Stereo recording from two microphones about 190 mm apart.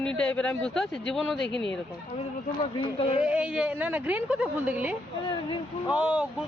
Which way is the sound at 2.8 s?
30° left (ahead or behind).